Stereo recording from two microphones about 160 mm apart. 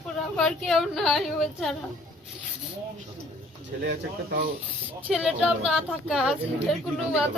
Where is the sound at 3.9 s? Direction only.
65° right (ahead or behind).